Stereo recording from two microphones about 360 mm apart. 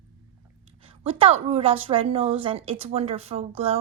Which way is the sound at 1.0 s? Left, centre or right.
Centre.